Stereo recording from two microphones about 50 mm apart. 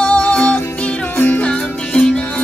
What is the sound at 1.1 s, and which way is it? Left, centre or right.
Music, left.